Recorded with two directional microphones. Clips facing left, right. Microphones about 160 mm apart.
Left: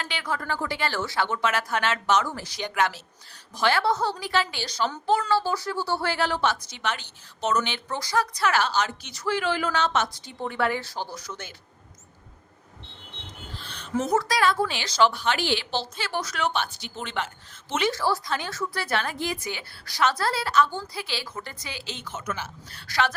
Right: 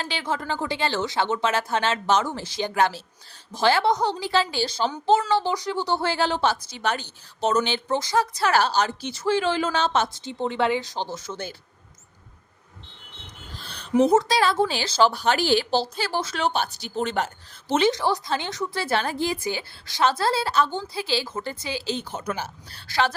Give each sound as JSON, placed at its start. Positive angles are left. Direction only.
{"t": 0.0, "sound": "a woman's voice", "side_deg": -30}
{"t": 3.8, "sound": "a woman's voice", "side_deg": -20}
{"t": 5.3, "sound": "a woman's voice", "side_deg": -20}
{"t": 13.5, "sound": "a sound", "side_deg": -40}
{"t": 14.0, "sound": "a woman's voice", "side_deg": -25}
{"t": 17.9, "sound": "a woman's voice", "side_deg": -20}